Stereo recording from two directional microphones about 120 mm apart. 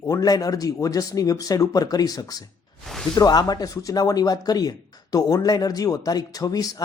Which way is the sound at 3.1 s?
35° left (ahead or behind).